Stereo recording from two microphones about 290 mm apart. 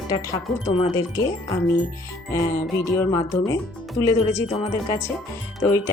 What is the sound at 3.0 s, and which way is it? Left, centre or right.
Speech, centre.